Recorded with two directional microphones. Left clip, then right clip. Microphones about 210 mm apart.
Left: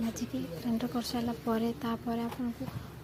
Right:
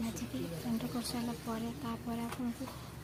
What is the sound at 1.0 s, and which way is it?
Speech, 15° left (ahead or behind).